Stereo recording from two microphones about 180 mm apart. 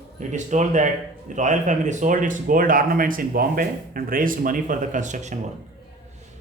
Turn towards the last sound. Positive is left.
turn(degrees=-40)  # may be behind; listen again after turning